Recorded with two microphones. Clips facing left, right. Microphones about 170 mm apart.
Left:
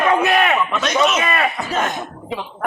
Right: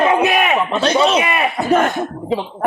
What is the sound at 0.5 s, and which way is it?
Speech, 30° right (ahead or behind).